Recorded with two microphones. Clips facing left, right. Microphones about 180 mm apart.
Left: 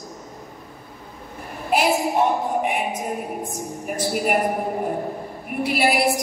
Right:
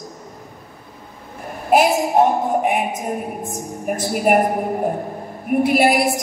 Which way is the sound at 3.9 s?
50° right (ahead or behind).